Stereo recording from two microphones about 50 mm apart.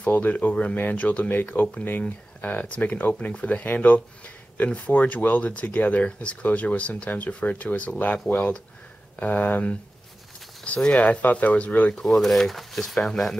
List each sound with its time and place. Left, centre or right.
0.0 s speech: left
1.5 s speech: left
1.9 s speech: left
8.3 s speech: left
10.9 s speech: left
11.9 s speech: centre